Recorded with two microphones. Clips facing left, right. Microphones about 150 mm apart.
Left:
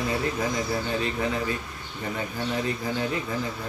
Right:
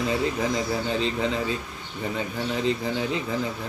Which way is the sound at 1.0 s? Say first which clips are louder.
Right 2 dB; 25° right (ahead or behind).